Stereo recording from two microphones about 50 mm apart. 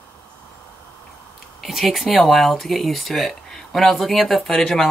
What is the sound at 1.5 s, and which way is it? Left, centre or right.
Speech, centre.